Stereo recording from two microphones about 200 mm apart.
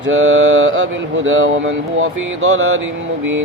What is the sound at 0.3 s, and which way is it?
Speech, 80° right.